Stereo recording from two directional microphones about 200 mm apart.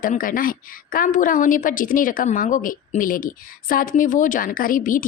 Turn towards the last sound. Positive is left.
turn(degrees=40)  # may be behind; listen again after turning